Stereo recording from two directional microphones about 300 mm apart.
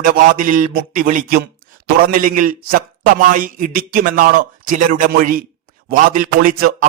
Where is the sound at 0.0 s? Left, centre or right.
Right.